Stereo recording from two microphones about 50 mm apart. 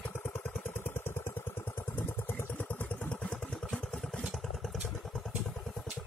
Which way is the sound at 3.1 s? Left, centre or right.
Left.